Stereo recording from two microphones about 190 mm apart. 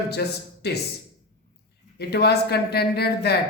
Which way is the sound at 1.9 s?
60° left (ahead or behind).